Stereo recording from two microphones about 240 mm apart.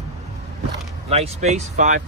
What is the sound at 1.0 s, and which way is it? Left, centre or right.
Speech, right.